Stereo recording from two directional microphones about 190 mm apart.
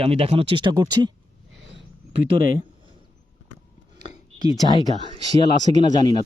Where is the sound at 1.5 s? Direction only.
70° right (ahead or behind).